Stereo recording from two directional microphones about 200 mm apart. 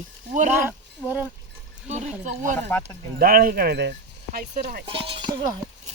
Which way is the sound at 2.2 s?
40° right (ahead or behind).